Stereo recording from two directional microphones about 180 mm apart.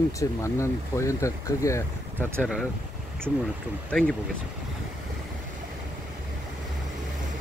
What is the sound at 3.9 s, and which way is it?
Speech, 5° left (ahead or behind).